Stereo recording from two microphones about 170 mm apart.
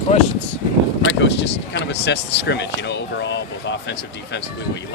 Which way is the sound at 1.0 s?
90° left.